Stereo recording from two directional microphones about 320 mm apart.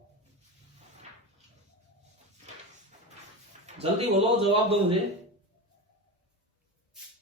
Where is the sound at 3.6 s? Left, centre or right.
Centre.